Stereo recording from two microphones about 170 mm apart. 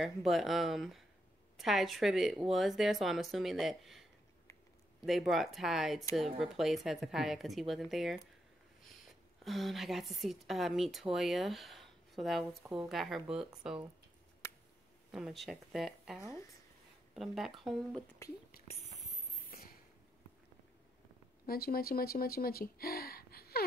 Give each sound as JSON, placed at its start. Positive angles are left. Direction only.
{"t": 0.0, "sound": "speech", "side_deg": 0}
{"t": 5.0, "sound": "speech", "side_deg": 0}
{"t": 9.4, "sound": "speech", "side_deg": 0}
{"t": 15.0, "sound": "speech", "side_deg": -5}
{"t": 21.5, "sound": "speech", "side_deg": 60}